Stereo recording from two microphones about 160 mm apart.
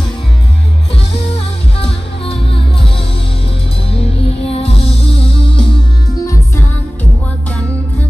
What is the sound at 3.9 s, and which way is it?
Music, 35° left (ahead or behind).